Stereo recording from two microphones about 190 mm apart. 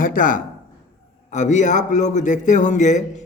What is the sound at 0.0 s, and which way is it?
A man's voice, 45° left (ahead or behind).